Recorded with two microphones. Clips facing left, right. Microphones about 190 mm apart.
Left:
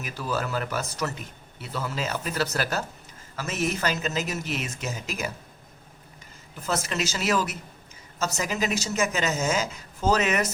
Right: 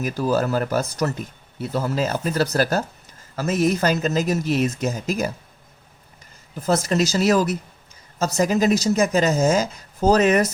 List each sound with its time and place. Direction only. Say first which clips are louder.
0.0 s speech: right 9 dB; 40° right (ahead or behind)
6.6 s speech: right 8 dB; 35° right (ahead or behind)